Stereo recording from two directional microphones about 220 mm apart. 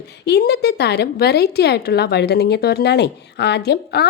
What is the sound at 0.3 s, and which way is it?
Speech, 45° left (ahead or behind).